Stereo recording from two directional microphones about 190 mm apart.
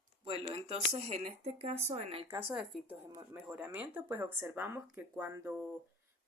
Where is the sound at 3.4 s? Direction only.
5° right (ahead or behind).